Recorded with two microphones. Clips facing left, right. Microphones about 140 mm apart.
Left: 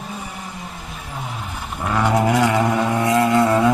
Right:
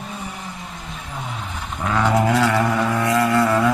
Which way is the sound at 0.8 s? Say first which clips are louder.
Right 1 dB; 5° left (ahead or behind).